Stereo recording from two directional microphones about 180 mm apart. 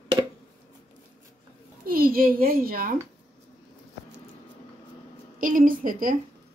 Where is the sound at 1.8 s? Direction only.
55° right (ahead or behind).